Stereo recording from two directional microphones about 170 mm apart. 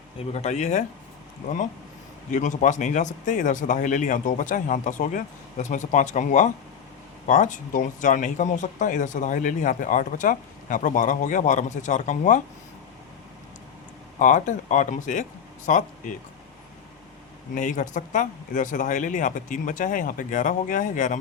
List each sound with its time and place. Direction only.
0.3 s speech: 40° left (ahead or behind)
2.3 s speech: 45° left (ahead or behind)
14.2 s speech: 45° left (ahead or behind)
17.5 s speech: 50° left (ahead or behind)